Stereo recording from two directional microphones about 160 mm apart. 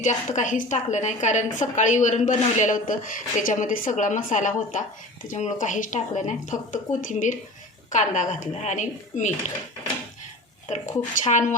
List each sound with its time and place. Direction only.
0.0 s a woman's voice: 50° left (ahead or behind)
10.7 s a woman's voice: 50° left (ahead or behind)